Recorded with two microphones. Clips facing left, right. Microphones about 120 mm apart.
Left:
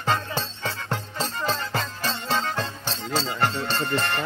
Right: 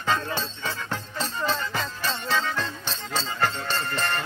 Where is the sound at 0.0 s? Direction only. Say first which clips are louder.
Left 1 dB; 30° left (ahead or behind).